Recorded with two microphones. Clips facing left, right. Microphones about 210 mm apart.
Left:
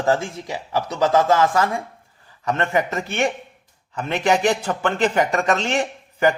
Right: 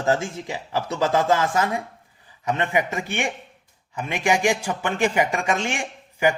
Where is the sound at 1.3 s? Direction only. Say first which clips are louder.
Left 3 dB; 20° right (ahead or behind).